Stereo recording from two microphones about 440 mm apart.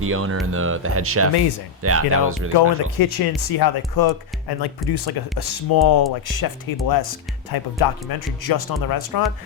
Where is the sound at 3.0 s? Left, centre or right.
Left.